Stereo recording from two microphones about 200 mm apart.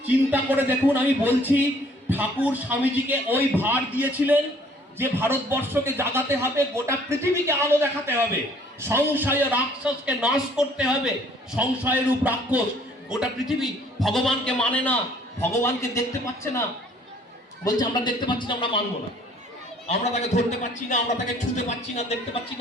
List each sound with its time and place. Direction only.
0.1 s a man's voice: 10° right (ahead or behind); by 16.6 s 15° left (ahead or behind)
17.7 s speech: 20° left (ahead or behind)
19.9 s a man's voice: 35° left (ahead or behind)